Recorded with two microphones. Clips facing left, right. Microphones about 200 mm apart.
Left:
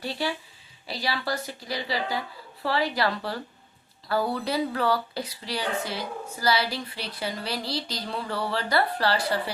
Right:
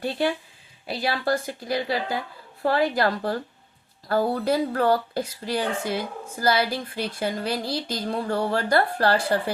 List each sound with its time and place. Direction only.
0.0 s speech: 55° right (ahead or behind)